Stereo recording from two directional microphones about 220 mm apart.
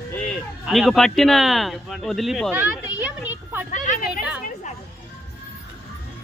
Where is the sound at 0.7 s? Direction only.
Centre (ahead or behind).